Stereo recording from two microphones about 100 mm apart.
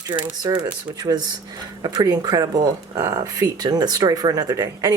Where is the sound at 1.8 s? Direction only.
45° right (ahead or behind).